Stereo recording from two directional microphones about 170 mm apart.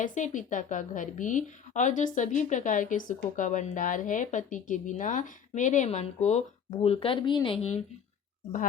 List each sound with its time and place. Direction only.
0.0 s a woman's voice: 50° left (ahead or behind)